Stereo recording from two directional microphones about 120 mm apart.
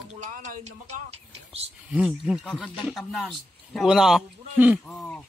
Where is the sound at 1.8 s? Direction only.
10° right (ahead or behind).